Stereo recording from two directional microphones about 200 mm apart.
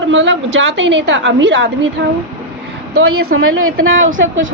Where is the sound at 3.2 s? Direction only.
50° right (ahead or behind).